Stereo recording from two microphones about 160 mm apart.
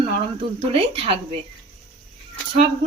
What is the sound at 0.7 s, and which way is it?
Speech, 35° right (ahead or behind).